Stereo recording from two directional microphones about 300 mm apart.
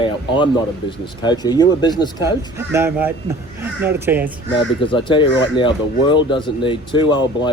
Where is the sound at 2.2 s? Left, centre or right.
Centre.